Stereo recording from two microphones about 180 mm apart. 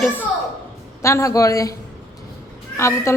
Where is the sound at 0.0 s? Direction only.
10° left (ahead or behind).